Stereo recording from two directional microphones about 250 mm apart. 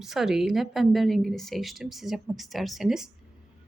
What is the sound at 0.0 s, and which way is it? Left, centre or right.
Speech, centre.